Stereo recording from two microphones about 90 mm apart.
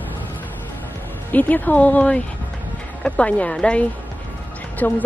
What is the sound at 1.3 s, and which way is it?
Speech, 20° left (ahead or behind).